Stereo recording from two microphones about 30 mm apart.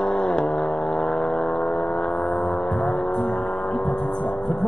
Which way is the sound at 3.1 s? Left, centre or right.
Left.